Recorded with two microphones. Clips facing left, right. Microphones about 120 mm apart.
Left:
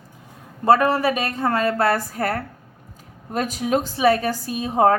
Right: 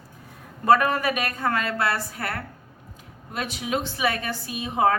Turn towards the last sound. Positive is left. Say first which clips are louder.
# left 5 dB
turn(degrees=40)  # may be behind; listen again after turning